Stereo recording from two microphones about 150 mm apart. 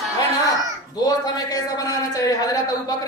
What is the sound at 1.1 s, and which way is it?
A woman's voice, 25° left (ahead or behind).